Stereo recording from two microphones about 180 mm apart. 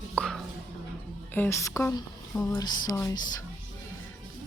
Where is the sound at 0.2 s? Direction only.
Centre (ahead or behind).